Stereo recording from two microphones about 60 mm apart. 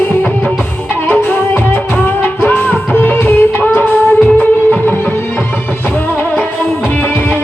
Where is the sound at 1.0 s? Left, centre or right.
Left.